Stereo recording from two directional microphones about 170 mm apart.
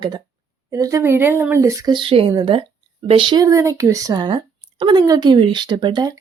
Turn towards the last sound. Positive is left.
turn(degrees=-25)  # may be behind; listen again after turning